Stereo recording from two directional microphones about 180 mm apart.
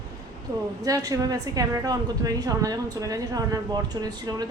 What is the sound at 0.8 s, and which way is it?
A woman's voice, 20° right (ahead or behind).